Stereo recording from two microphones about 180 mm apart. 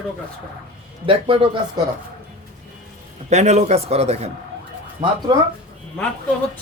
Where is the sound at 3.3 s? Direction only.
40° right (ahead or behind).